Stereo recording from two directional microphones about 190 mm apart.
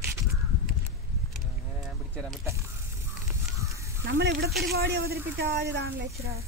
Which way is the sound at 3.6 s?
15° right (ahead or behind).